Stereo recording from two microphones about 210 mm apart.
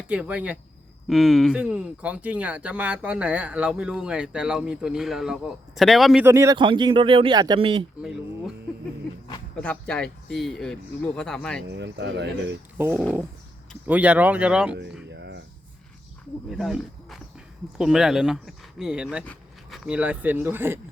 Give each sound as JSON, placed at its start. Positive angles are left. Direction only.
{"t": 0.1, "sound": "speech", "side_deg": -5}
{"t": 6.2, "sound": "speech", "side_deg": -15}
{"t": 9.6, "sound": "speech", "side_deg": 5}
{"t": 11.7, "sound": "speech", "side_deg": -55}
{"t": 12.7, "sound": "speech", "side_deg": -10}
{"t": 15.1, "sound": "a sound", "side_deg": -55}
{"t": 16.5, "sound": "speech", "side_deg": 0}